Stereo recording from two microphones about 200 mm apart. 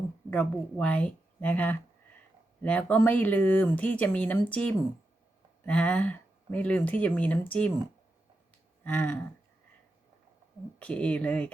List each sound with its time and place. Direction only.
0.3 s speech: 5° left (ahead or behind)
8.8 s a sound: 5° left (ahead or behind)
10.8 s speech: 5° left (ahead or behind)